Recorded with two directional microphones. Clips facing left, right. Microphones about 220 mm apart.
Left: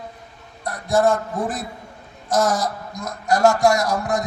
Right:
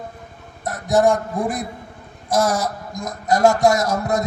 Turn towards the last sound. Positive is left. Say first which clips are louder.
# right 1 dB
turn(degrees=-25)  # may be behind; listen again after turning